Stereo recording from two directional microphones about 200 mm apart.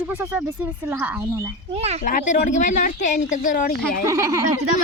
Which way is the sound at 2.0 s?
40° left (ahead or behind).